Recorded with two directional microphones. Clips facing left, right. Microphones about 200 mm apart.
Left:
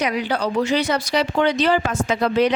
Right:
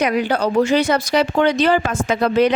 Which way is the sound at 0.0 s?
50° right (ahead or behind).